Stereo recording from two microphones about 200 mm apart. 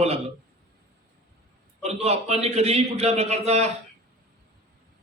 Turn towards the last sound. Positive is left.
turn(degrees=-30)  # may be behind; listen again after turning